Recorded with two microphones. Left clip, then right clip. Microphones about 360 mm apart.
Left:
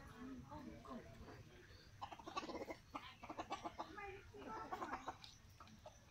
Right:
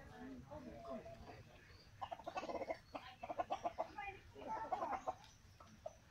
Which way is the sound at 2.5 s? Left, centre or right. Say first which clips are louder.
Right 5 dB; centre.